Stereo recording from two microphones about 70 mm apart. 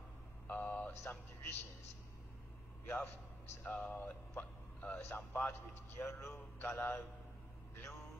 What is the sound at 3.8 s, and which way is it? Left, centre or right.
Speech, left.